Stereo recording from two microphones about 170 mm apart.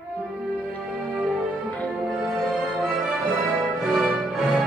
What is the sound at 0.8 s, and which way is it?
Music, 5° right (ahead or behind).